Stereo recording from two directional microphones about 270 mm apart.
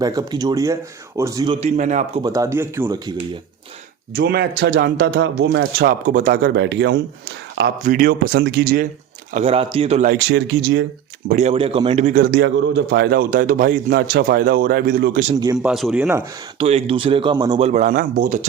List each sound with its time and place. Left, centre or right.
0.0 s speech: centre
2.2 s speech: centre
4.1 s a man's voice: right
9.3 s a man's voice: right
10.2 s a man's voice: right
11.3 s a man's voice: right
15.5 s speech: centre
16.6 s a man's voice: right